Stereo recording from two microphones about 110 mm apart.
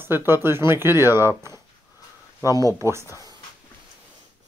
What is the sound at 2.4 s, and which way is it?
Speech, 30° right (ahead or behind).